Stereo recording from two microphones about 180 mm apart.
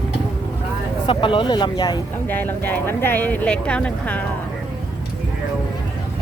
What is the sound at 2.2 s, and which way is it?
Speech, 10° left (ahead or behind).